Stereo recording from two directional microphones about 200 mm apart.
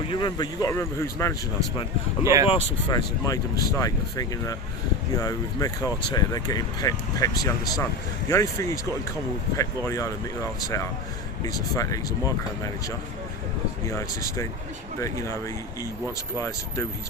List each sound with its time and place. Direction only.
0.1 s speech: 20° left (ahead or behind)
2.2 s speech: 15° right (ahead or behind)
2.5 s speech: 20° left (ahead or behind)
13.8 s speech: 15° left (ahead or behind)